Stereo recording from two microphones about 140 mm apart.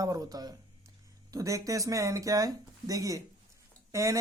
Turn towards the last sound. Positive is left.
turn(degrees=-20)  # may be behind; listen again after turning